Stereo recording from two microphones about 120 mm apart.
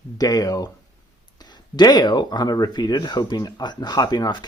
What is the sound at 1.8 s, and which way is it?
Speech, 35° left (ahead or behind).